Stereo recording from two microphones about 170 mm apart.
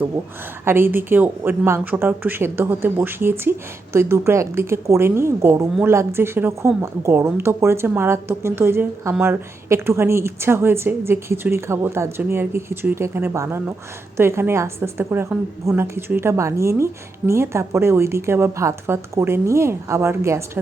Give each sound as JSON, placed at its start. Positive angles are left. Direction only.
{"t": 0.6, "sound": "a woman's voice", "side_deg": -15}